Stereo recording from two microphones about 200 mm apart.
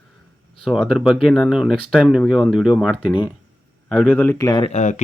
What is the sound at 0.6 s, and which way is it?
Speech, centre (ahead or behind).